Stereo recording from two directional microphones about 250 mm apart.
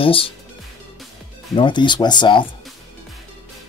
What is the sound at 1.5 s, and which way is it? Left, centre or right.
Speech, centre.